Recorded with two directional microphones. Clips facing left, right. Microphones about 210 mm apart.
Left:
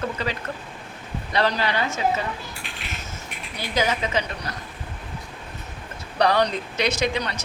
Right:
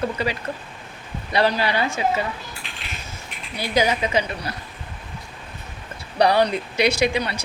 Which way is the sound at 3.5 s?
10° right (ahead or behind).